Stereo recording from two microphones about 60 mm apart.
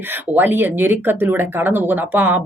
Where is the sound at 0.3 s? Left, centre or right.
Right.